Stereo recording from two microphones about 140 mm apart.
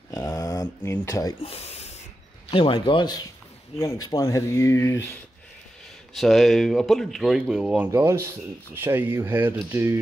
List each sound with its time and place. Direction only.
0.1 s speech: 25° left (ahead or behind)
1.4 s a sound: 45° left (ahead or behind)
2.5 s a man's voice: 40° left (ahead or behind); by 5.1 s 20° left (ahead or behind)
6.1 s speech: centre (ahead or behind)
7.9 s speech: 20° right (ahead or behind)